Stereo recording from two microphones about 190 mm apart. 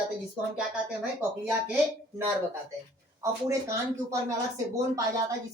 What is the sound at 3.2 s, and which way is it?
Speech, 15° right (ahead or behind).